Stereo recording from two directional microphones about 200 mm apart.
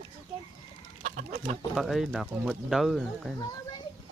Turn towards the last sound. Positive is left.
turn(degrees=0)  # may be behind; listen again after turning